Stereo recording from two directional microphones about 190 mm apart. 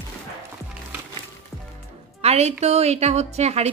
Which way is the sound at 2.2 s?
35° right (ahead or behind).